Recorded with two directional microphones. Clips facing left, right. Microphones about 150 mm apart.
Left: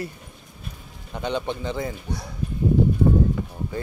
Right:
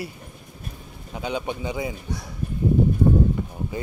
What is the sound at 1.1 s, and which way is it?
Speech, 5° right (ahead or behind).